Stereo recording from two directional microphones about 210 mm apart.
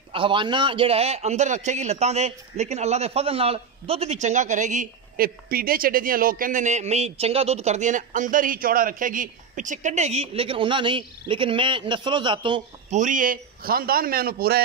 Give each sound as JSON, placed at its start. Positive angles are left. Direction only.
{"t": 0.1, "sound": "a man's voice", "side_deg": -25}
{"t": 12.9, "sound": "a man's voice", "side_deg": -40}